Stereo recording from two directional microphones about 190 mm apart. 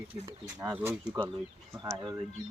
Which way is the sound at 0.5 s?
10° right (ahead or behind).